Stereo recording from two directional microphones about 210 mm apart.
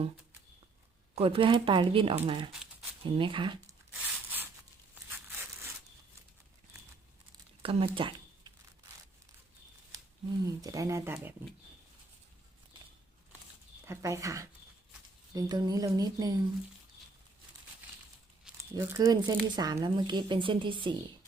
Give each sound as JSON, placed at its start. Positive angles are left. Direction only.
{"t": 1.1, "sound": "speech", "side_deg": -25}
{"t": 3.9, "sound": "a sound", "side_deg": -10}
{"t": 7.6, "sound": "speech", "side_deg": -25}
{"t": 10.4, "sound": "speech", "side_deg": -15}
{"t": 13.8, "sound": "speech", "side_deg": -15}
{"t": 18.5, "sound": "a sound", "side_deg": -5}
{"t": 18.8, "sound": "speech", "side_deg": -15}